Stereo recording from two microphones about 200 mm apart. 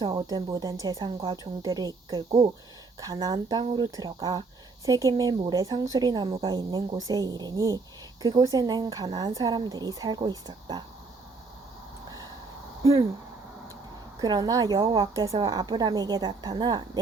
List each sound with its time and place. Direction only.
0.0 s a woman's voice: 20° right (ahead or behind)
14.2 s a woman's voice: 20° right (ahead or behind)